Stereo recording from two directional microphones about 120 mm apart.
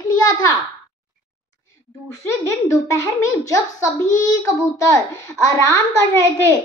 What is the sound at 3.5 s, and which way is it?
A child's voice, 30° left (ahead or behind).